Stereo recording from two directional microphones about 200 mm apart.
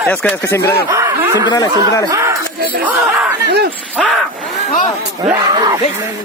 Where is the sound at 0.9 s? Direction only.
15° right (ahead or behind).